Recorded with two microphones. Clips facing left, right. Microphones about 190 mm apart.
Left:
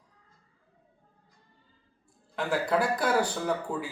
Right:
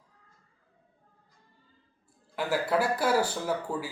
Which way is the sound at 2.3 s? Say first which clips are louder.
Even; 5° right (ahead or behind).